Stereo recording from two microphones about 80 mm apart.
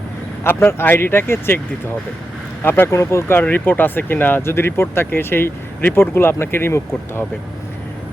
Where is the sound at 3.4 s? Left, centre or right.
Left.